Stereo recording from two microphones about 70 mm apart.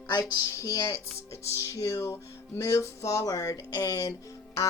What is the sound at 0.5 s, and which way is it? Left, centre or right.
Speech, left.